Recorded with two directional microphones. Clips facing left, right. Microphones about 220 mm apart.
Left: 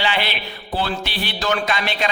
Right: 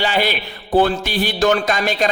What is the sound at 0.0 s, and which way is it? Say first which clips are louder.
Mantra: right 4 dB; 45° right (ahead or behind).